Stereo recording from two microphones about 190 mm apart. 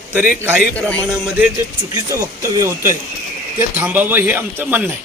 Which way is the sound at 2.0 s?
20° right (ahead or behind).